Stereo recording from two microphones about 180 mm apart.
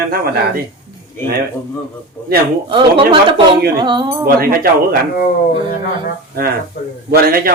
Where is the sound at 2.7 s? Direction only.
30° right (ahead or behind).